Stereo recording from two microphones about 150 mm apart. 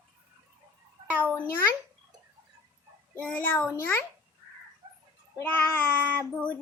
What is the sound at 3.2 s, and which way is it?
Speech, 10° left (ahead or behind).